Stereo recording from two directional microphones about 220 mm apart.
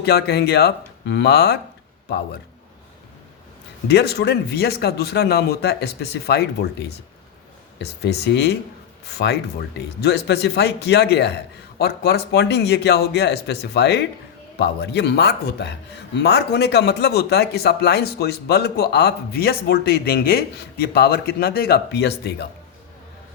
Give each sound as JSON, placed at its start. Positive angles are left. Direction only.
{"t": 0.0, "sound": "speech", "side_deg": 45}
{"t": 3.8, "sound": "speech", "side_deg": 50}